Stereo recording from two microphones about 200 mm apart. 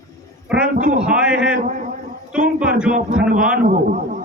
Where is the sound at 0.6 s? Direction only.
40° right (ahead or behind).